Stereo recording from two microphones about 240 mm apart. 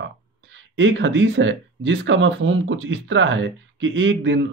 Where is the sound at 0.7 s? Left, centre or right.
Right.